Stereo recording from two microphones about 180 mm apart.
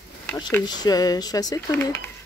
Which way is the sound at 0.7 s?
20° left (ahead or behind).